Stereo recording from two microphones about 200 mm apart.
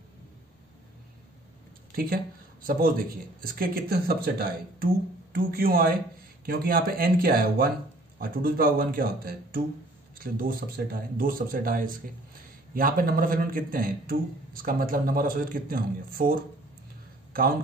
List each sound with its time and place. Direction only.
2.6 s a man's voice: 45° right (ahead or behind)